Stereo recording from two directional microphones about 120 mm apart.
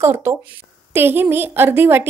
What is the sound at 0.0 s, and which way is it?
A woman's voice, 25° right (ahead or behind).